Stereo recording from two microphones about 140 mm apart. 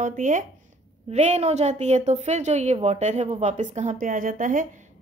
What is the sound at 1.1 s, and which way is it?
A woman's voice, 50° right (ahead or behind).